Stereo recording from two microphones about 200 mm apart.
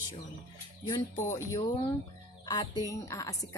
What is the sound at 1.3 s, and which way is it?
A woman's voice, 15° left (ahead or behind).